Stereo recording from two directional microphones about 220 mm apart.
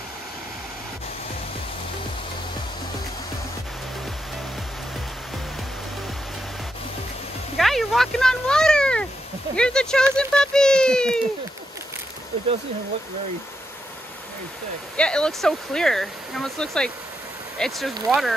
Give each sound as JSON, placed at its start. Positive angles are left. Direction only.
{"t": 7.5, "sound": "a sound", "side_deg": 0}
{"t": 9.6, "sound": "speech", "side_deg": 5}
{"t": 15.0, "sound": "speech", "side_deg": 5}